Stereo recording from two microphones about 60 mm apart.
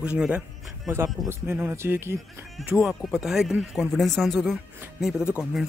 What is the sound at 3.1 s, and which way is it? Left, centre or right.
Speech, centre.